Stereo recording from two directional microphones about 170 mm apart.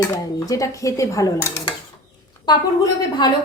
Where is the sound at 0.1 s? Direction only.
20° left (ahead or behind).